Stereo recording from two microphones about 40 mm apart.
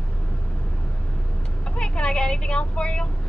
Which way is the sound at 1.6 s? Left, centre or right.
Left.